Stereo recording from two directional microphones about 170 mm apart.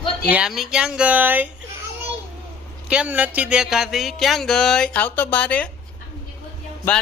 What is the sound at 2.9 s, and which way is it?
Music, 10° right (ahead or behind).